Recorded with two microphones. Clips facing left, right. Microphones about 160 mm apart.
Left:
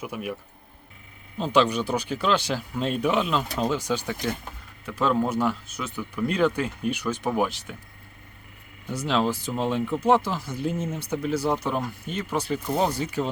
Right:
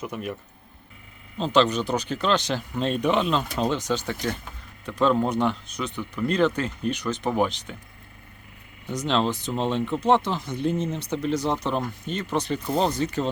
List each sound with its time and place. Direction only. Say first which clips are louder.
0.0 s speech: even; 10° left (ahead or behind)
1.4 s speech: right 1 dB; 10° left (ahead or behind)
8.9 s speech: even; 10° left (ahead or behind)